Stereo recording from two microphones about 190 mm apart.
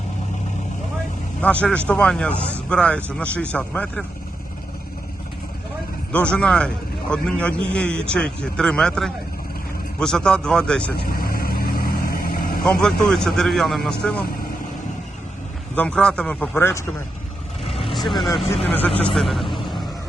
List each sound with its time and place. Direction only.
1.4 s a man's voice: 5° left (ahead or behind)
6.1 s a man's voice: 5° left (ahead or behind)
10.9 s vehicle: 50° left (ahead or behind)
12.6 s a man's voice: 5° left (ahead or behind)
15.7 s speech: 5° left (ahead or behind)
18.7 s a man's voice: 10° left (ahead or behind)